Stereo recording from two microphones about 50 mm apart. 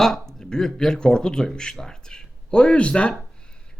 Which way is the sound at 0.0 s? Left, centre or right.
Centre.